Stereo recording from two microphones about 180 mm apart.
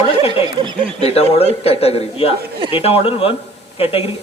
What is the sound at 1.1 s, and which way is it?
Speech, 35° left (ahead or behind).